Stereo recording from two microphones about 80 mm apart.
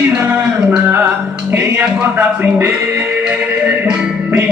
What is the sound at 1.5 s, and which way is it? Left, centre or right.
Speech, right.